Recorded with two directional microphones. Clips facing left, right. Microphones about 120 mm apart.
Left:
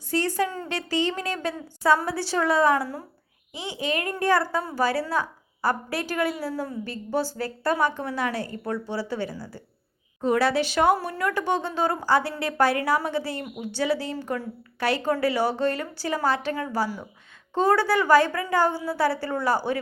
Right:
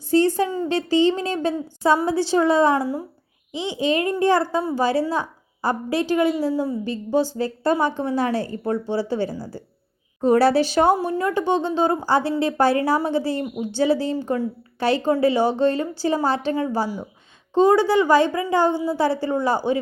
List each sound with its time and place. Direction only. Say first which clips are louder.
0.1 s a woman's voice: right 7 dB; 25° right (ahead or behind)
6.5 s a woman's voice: right 7 dB; 10° right (ahead or behind); by 10.9 s 30° right (ahead or behind)
10.9 s a woman's voice: right 5 dB; 20° right (ahead or behind)